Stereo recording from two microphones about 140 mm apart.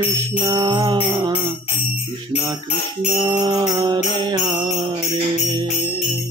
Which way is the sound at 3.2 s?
30° right (ahead or behind).